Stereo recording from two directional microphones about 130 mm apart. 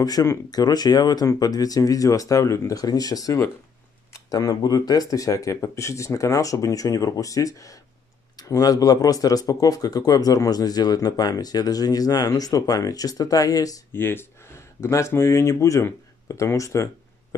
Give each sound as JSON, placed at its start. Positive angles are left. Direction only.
{"t": 0.0, "sound": "speech", "side_deg": 25}
{"t": 13.9, "sound": "speech", "side_deg": 15}